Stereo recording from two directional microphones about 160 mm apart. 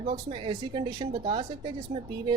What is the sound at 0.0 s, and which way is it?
Speech, 40° right (ahead or behind).